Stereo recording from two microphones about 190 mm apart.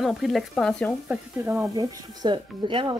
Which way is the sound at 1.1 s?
10° right (ahead or behind).